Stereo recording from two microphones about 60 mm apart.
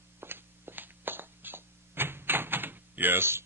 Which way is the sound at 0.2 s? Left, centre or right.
Right.